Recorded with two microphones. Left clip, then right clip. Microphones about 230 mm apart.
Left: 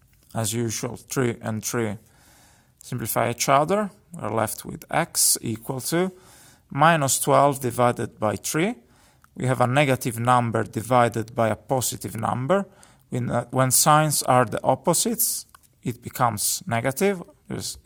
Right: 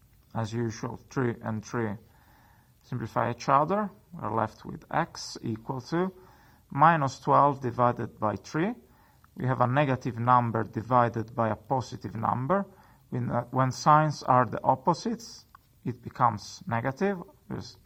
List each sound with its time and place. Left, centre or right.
0.3 s speech: left